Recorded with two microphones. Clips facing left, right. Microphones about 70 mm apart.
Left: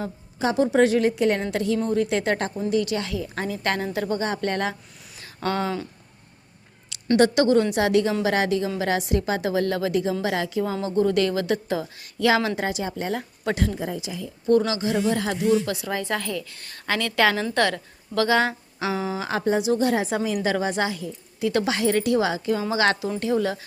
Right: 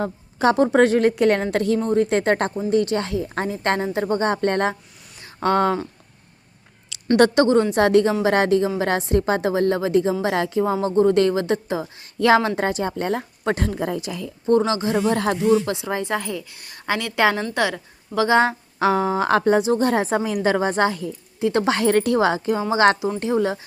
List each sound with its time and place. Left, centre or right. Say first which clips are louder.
0.0 s a woman's voice: right 6 dB; right
1.8 s a woman's voice: right 4 dB; right
7.3 s a woman's voice: right 3 dB; right
10.6 s a woman's voice: right 5 dB; right
12.6 s a woman's voice: right 4 dB; right
14.7 s a woman's voice: right 3 dB; right
15.4 s a woman's voice: right 3 dB; right
18.3 s a woman's voice: right 4 dB; right
18.8 s a woman's voice: right 8 dB; right
19.3 s a woman's voice: right 5 dB; right
19.6 s a woman's voice: right 2 dB; right